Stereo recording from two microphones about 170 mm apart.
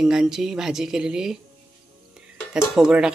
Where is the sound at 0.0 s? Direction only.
5° right (ahead or behind).